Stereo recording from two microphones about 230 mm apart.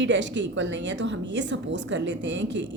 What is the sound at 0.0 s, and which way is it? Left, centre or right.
A woman's voice, right.